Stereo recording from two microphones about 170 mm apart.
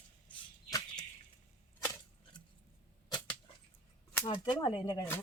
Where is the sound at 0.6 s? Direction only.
20° left (ahead or behind).